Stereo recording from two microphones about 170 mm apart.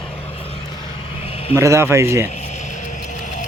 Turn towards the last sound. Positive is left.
turn(degrees=45)  # may be behind; listen again after turning